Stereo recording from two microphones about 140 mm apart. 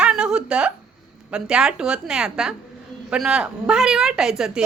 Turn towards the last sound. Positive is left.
turn(degrees=-5)  # may be behind; listen again after turning